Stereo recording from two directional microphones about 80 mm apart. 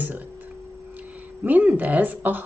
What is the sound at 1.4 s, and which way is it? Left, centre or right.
Speech, right.